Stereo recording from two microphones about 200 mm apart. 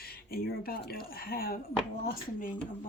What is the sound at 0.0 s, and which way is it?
Speech, 50° left (ahead or behind).